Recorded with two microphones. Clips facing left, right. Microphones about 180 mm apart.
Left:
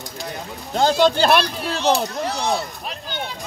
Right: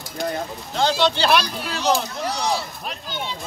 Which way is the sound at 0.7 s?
45° left (ahead or behind).